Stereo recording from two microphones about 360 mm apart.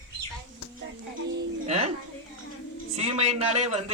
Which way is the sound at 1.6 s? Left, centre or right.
Centre.